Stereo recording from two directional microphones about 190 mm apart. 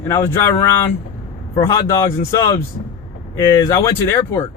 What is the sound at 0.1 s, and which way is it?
Speech, 10° left (ahead or behind).